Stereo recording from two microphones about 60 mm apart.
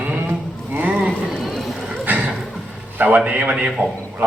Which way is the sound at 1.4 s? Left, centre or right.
Centre.